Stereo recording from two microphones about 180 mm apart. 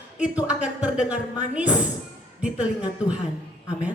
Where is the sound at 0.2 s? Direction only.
5° right (ahead or behind).